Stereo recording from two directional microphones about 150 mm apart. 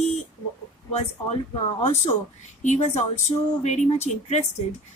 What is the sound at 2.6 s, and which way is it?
Speech, 50° left (ahead or behind).